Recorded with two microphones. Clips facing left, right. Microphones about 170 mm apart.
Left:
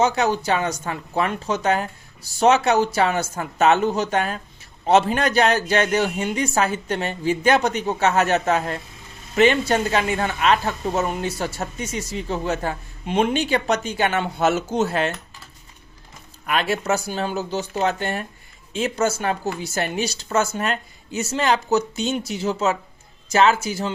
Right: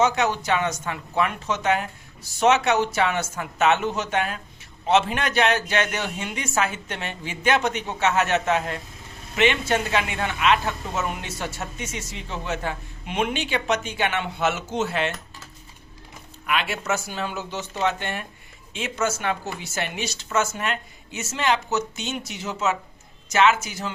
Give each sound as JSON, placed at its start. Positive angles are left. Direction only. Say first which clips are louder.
{"t": 0.0, "sound": "speech", "louder": "left 2 dB", "side_deg": 35}
{"t": 16.5, "sound": "speech", "louder": "left 4 dB", "side_deg": 40}